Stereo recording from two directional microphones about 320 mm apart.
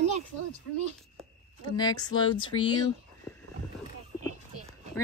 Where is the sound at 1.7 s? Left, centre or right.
Centre.